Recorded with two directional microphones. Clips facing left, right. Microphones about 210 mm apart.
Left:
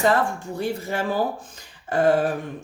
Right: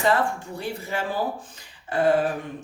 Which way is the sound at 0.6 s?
45° left (ahead or behind).